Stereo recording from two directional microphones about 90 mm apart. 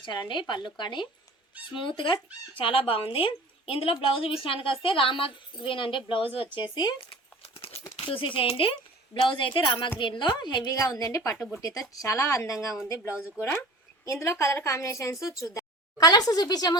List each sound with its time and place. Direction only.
0.0 s a woman's voice: 60° left (ahead or behind)
2.6 s a woman's voice: 90° left; by 6.9 s 65° left (ahead or behind)
7.6 s speech: 85° left
9.2 s a woman's voice: 70° left (ahead or behind); by 10.8 s 50° left (ahead or behind)
10.9 s speech: 35° left (ahead or behind)
12.5 s a woman's voice: 5° right (ahead or behind)
14.0 s a woman's voice: 35° left (ahead or behind)